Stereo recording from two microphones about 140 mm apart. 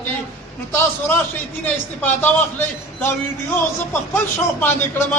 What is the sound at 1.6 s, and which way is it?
A man's voice, 15° left (ahead or behind).